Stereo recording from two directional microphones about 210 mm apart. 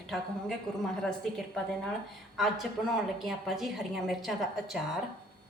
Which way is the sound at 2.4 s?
Centre (ahead or behind).